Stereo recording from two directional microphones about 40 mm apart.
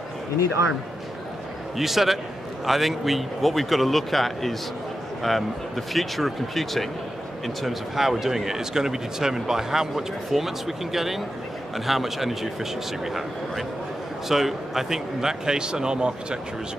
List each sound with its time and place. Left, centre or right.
1.8 s speech: centre; by 16.3 s right